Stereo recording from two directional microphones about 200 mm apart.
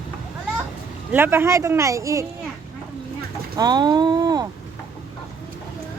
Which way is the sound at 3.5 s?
20° right (ahead or behind).